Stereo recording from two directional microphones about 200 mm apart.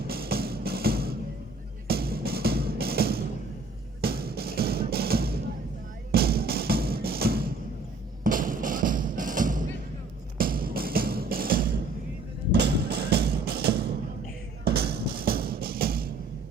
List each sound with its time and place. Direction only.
0.1 s music: 50° right (ahead or behind)